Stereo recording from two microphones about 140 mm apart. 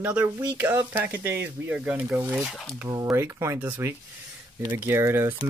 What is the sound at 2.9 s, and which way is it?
Speech, 20° right (ahead or behind).